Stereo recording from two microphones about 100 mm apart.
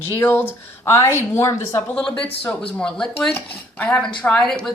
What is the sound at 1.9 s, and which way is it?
Speech, 10° left (ahead or behind).